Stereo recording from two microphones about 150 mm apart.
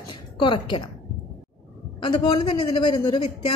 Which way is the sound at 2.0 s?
35° left (ahead or behind).